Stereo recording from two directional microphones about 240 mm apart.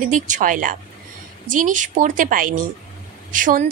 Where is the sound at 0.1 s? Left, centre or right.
Right.